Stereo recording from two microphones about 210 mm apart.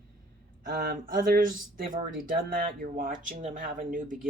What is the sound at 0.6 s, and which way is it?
Speech, 45° right (ahead or behind).